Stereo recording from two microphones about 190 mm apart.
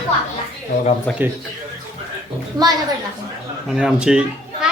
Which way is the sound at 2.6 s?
20° right (ahead or behind).